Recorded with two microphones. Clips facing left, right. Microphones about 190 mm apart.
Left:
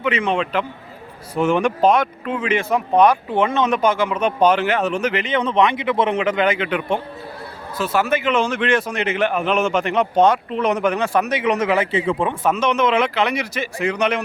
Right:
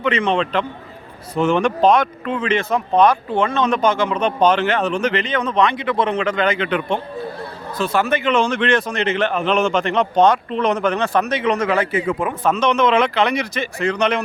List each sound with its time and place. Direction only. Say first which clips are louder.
0.0 s a man's voice: right 2 dB; 5° left (ahead or behind)
5.2 s a man's voice: left 1 dB; 25° left (ahead or behind)
12.4 s a man's voice: right 4 dB; 10° left (ahead or behind)